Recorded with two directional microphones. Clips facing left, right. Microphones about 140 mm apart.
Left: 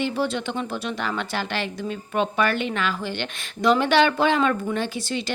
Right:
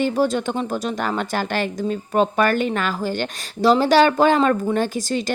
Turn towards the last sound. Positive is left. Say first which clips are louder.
# right 5 dB
turn(degrees=-45)  # may be behind; listen again after turning